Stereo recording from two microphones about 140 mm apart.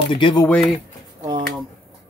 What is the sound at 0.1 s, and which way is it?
Speech, 35° left (ahead or behind).